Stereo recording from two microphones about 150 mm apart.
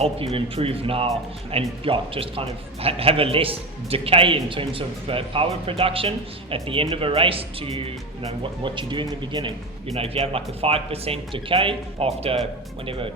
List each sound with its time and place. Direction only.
0.0 s speech: 40° right (ahead or behind)